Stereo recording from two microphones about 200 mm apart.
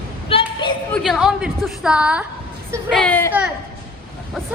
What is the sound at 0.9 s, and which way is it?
A woman's voice, centre (ahead or behind).